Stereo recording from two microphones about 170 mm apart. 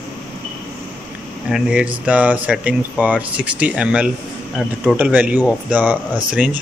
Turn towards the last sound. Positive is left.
turn(degrees=-5)  # may be behind; listen again after turning